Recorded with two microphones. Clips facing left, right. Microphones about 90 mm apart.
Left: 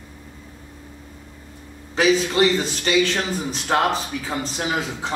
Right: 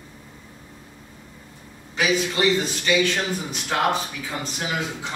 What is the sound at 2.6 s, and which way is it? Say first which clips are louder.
Speech: left 1 dB; 30° left (ahead or behind).